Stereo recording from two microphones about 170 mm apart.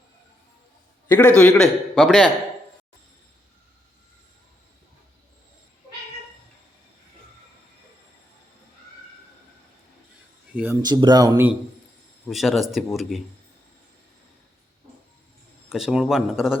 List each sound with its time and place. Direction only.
1.0 s a man's voice: 10° left (ahead or behind)
10.5 s a sound: 10° right (ahead or behind)
10.8 s speech: 25° right (ahead or behind)
12.3 s a man's voice: centre (ahead or behind)
15.7 s a man's voice: 5° right (ahead or behind)